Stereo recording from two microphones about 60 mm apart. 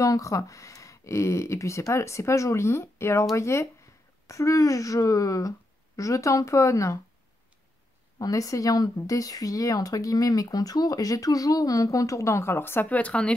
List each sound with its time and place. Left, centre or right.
0.0 s speech: left
8.2 s speech: left
12.9 s speech: left